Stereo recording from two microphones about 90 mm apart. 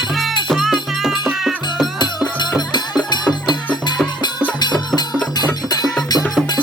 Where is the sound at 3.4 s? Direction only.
55° left (ahead or behind).